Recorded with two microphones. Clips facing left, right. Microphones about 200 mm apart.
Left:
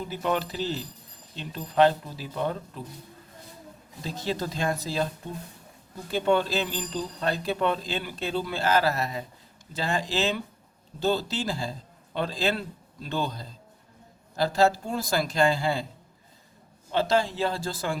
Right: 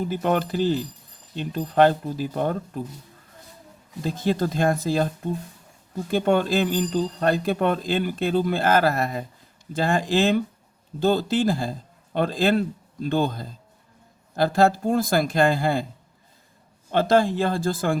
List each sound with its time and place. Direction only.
0.0 s speech: 50° right (ahead or behind)
4.0 s speech: 50° right (ahead or behind)
6.1 s speech: 50° right (ahead or behind)
16.9 s speech: 50° right (ahead or behind)